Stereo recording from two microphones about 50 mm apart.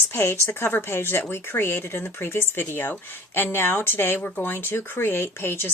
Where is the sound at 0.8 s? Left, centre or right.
Left.